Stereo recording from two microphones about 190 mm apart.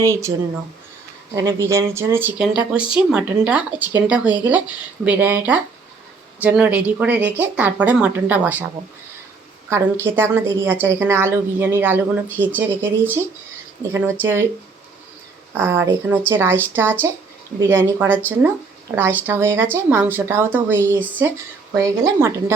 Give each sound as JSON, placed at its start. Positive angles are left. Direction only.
{"t": 0.0, "sound": "speech", "side_deg": -15}
{"t": 1.4, "sound": "speech", "side_deg": -15}
{"t": 9.6, "sound": "speech", "side_deg": -10}
{"t": 15.5, "sound": "speech", "side_deg": -10}